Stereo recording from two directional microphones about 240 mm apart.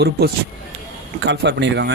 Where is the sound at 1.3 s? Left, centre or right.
Right.